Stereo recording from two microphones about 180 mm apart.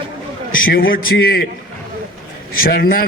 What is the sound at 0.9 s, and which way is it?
Speech, 60° left (ahead or behind).